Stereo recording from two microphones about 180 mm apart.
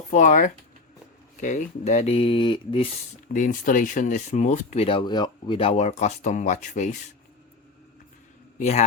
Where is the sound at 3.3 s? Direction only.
50° left (ahead or behind).